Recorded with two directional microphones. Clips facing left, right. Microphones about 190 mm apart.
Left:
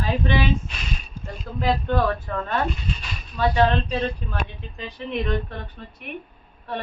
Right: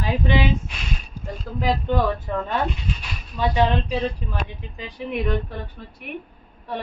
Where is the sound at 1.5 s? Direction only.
15° right (ahead or behind).